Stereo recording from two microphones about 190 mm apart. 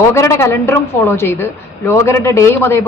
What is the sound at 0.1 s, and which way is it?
A woman's voice, 15° left (ahead or behind).